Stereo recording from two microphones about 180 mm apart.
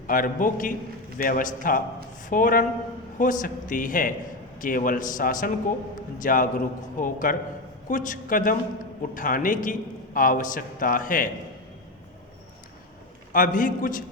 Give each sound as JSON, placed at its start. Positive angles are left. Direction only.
{"t": 0.1, "sound": "speech", "side_deg": 50}
{"t": 13.3, "sound": "speech", "side_deg": 50}